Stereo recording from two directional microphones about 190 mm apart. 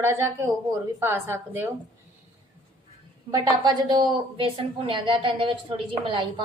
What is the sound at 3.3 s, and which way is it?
A woman's voice, 20° right (ahead or behind).